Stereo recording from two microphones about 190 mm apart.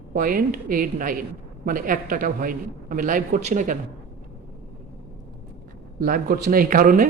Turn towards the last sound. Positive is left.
turn(degrees=-45)  # may be behind; listen again after turning